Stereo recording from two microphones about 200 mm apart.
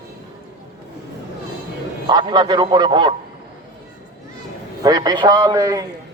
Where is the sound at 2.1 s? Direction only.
20° right (ahead or behind).